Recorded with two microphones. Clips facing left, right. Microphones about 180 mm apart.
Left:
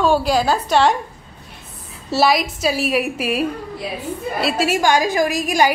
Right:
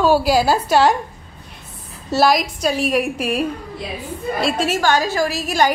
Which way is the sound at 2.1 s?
Centre (ahead or behind).